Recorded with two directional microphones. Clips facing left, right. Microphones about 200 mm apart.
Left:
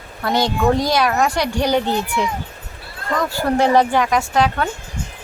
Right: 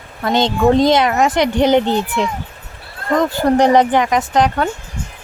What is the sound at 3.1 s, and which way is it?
Speech, 20° right (ahead or behind).